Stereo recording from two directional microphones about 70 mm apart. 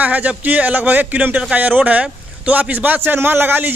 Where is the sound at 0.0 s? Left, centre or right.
Right.